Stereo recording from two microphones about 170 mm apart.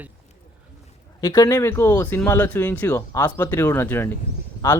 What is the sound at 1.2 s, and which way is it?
Speech, 20° left (ahead or behind).